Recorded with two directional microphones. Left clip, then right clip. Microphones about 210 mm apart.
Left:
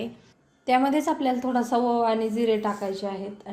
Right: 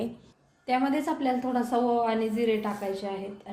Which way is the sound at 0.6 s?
45° left (ahead or behind).